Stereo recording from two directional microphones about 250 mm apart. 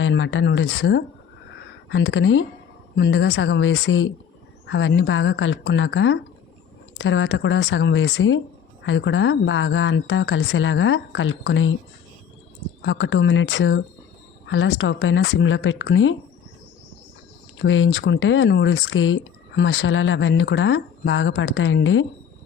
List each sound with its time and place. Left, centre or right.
0.0 s speech: left
12.8 s speech: left
17.6 s speech: left